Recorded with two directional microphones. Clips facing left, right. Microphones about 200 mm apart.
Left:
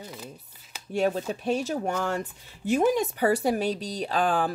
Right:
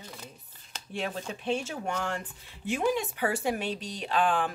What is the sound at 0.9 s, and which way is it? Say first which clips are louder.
Speech: left 9 dB; 40° left (ahead or behind).